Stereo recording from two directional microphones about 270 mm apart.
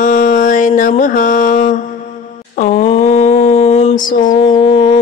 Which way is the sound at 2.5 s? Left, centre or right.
Left.